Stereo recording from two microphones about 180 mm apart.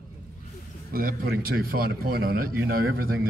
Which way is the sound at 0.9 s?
55° right (ahead or behind).